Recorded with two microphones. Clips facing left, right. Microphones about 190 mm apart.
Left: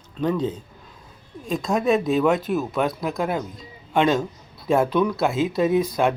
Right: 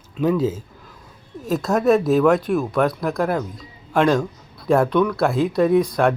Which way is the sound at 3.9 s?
Centre (ahead or behind).